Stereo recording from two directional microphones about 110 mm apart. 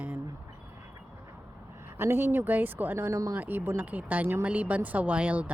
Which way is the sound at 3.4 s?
15° right (ahead or behind).